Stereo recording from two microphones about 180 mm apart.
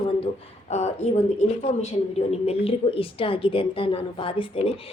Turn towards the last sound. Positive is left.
turn(degrees=30)  # may be behind; listen again after turning